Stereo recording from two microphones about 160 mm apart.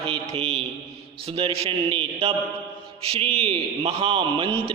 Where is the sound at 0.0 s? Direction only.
35° right (ahead or behind).